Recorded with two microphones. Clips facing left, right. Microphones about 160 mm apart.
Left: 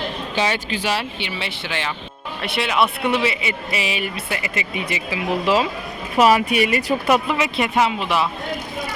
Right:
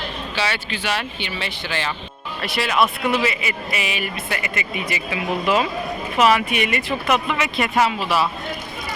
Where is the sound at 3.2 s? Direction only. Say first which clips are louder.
Left 1 dB; 30° left (ahead or behind).